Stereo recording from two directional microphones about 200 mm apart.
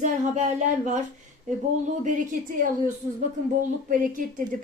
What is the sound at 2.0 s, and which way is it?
Speech, 40° right (ahead or behind).